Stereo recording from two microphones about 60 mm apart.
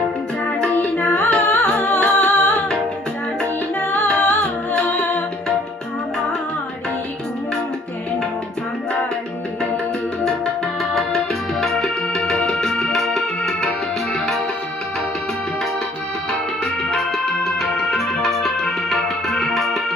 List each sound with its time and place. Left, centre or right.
0.9 s humming: left
3.8 s music: left
11.6 s music: centre
16.9 s organ: centre